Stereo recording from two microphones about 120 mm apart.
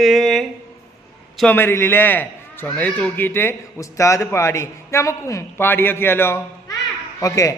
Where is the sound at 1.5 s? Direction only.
20° left (ahead or behind).